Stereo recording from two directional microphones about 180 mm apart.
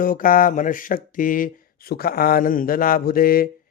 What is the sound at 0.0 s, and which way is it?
Speech, 50° left (ahead or behind).